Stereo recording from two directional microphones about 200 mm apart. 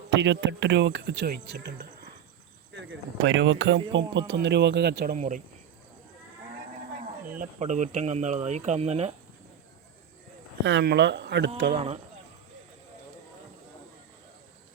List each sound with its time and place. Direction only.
0.2 s speech: 60° right (ahead or behind)
2.7 s speech: 65° right (ahead or behind)
4.3 s speech: 60° right (ahead or behind)
5.1 s speech: 35° right (ahead or behind)
7.2 s speech: 45° right (ahead or behind)
10.6 s speech: 65° right (ahead or behind)